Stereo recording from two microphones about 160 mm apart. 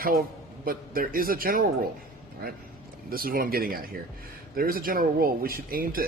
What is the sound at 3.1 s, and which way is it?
A man's voice, 65° right (ahead or behind).